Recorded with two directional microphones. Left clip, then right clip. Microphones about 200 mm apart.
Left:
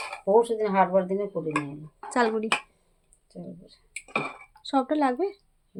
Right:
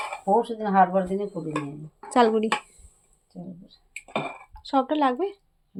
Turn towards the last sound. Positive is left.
turn(degrees=-5)  # may be behind; listen again after turning